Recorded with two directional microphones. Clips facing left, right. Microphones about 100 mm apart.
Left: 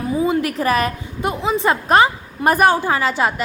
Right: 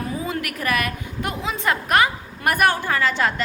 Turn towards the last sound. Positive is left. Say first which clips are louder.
# left 3 dB
turn(degrees=20)  # may be behind; listen again after turning